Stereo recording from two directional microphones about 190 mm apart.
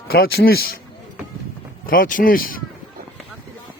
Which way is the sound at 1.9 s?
45° left (ahead or behind).